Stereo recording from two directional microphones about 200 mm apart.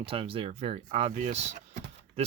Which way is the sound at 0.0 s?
25° right (ahead or behind).